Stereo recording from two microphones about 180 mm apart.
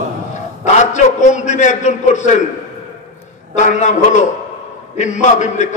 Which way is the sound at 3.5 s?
40° left (ahead or behind).